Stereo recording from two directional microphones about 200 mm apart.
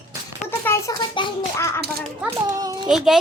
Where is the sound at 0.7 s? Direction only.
10° left (ahead or behind).